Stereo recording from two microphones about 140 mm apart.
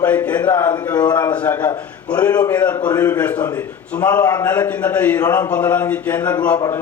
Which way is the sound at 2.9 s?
25° left (ahead or behind).